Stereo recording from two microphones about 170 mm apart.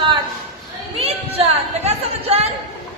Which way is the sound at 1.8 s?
40° right (ahead or behind).